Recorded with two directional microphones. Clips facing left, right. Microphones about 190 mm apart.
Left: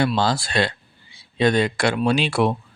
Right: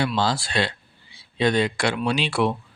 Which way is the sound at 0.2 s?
45° left (ahead or behind).